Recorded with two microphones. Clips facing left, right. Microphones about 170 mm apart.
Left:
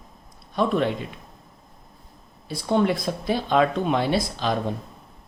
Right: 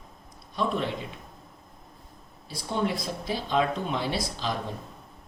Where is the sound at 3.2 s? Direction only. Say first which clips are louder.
Left 6 dB; 60° left (ahead or behind).